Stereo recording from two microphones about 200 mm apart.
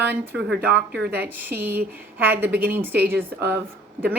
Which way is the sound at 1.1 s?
10° right (ahead or behind).